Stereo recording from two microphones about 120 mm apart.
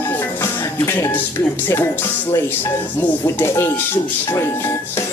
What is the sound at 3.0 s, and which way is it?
Speech, 20° left (ahead or behind).